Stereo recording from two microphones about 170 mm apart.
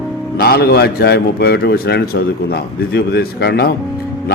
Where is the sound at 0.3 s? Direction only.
65° left (ahead or behind).